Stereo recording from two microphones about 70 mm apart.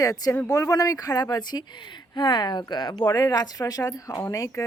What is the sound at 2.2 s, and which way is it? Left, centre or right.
Speech, left.